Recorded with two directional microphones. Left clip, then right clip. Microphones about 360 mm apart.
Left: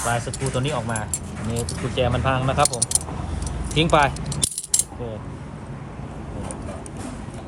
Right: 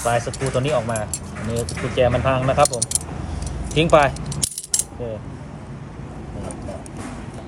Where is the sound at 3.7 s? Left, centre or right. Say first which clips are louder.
Right 3 dB; centre.